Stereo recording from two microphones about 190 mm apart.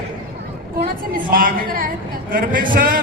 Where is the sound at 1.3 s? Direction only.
50° right (ahead or behind).